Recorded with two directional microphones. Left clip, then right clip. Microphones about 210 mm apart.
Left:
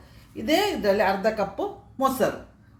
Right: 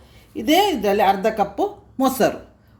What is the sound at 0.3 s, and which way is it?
A woman's voice, 45° right (ahead or behind).